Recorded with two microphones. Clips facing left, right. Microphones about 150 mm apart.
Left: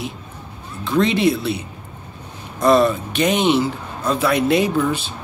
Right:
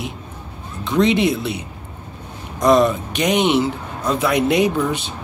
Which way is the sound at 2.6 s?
15° right (ahead or behind).